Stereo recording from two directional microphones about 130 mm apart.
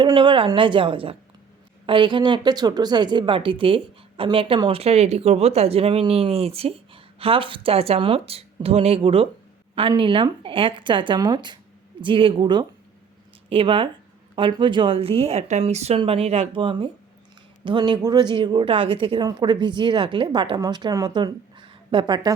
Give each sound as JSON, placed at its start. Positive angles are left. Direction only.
{"t": 0.0, "sound": "a woman's voice", "side_deg": -35}